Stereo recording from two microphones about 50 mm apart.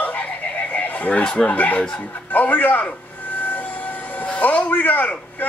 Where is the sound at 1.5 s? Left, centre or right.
Left.